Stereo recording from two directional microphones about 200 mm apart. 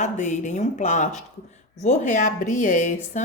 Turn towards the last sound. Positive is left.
turn(degrees=40)  # may be behind; listen again after turning